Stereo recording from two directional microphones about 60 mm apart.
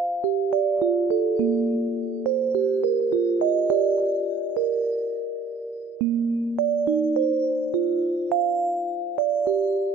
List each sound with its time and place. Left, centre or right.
3.6 s music: right
8.3 s music: centre